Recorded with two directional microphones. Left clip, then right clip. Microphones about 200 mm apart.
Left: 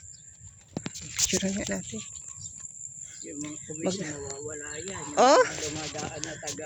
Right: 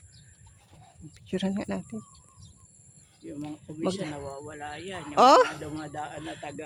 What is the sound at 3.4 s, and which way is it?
Speech, 15° right (ahead or behind).